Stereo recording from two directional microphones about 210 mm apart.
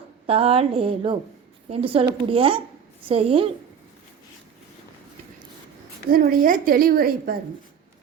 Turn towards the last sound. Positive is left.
turn(degrees=-45)  # may be behind; listen again after turning